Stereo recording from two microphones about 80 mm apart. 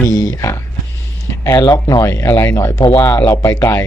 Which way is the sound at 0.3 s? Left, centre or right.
Left.